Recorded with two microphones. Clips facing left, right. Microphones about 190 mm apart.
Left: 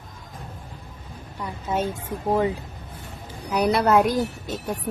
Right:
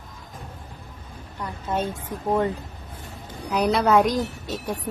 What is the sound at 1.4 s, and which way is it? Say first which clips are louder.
A woman's voice: left 1 dB; 5° left (ahead or behind).